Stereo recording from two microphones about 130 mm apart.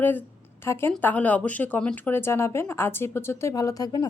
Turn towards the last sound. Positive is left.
turn(degrees=30)  # may be behind; listen again after turning